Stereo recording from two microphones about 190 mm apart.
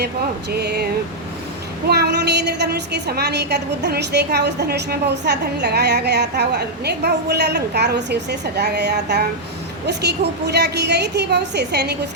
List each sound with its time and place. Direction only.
0.5 s speech: 60° right (ahead or behind)
1.9 s a woman's voice: 60° right (ahead or behind)